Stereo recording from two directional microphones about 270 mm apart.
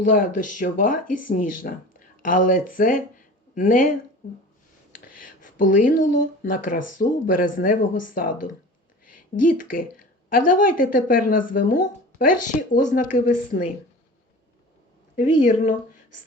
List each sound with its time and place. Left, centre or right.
0.0 s speech: left
15.4 s speech: left